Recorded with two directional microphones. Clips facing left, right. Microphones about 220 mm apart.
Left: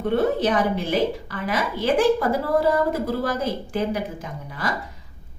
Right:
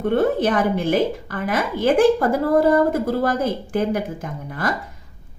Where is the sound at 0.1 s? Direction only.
50° right (ahead or behind).